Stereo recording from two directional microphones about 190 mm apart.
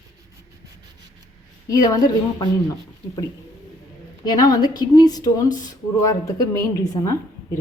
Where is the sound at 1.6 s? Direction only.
20° left (ahead or behind).